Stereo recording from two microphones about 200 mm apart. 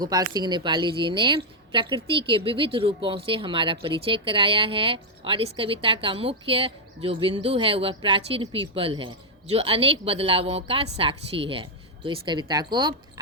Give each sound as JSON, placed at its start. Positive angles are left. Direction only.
{"t": 0.0, "sound": "speech", "side_deg": -20}